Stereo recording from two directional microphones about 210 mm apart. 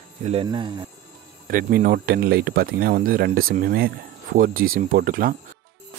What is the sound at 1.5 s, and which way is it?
Speech, 45° right (ahead or behind).